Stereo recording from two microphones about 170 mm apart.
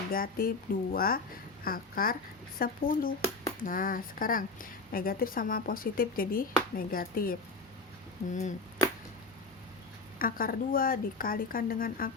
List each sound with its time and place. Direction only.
0.1 s speech: 60° left (ahead or behind)
8.3 s chop: 45° left (ahead or behind)
10.2 s speech: 55° left (ahead or behind)